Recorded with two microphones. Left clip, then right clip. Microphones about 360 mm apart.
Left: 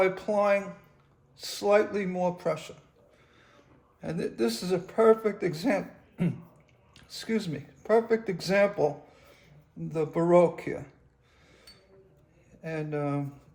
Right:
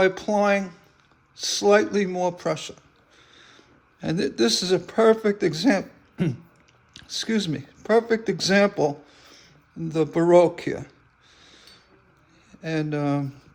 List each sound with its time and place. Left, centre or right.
0.0 s speech: right
3.3 s a sound: right
4.0 s speech: right
12.6 s speech: right